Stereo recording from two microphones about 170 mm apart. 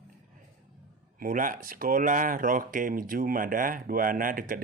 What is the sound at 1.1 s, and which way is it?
Speech, 55° right (ahead or behind).